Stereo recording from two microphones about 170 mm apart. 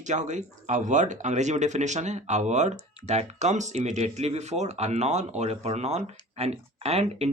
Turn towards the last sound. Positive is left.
turn(degrees=-35)  # may be behind; listen again after turning